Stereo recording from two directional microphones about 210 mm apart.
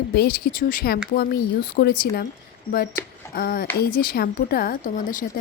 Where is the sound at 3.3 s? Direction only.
45° left (ahead or behind).